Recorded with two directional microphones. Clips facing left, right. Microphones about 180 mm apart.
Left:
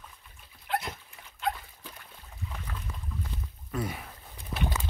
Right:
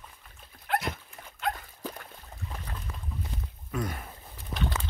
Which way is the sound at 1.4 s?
55° right (ahead or behind).